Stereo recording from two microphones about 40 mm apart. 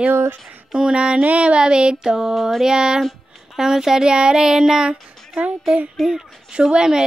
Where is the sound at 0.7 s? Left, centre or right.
Centre.